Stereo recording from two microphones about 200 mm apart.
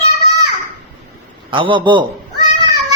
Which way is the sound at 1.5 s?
25° right (ahead or behind).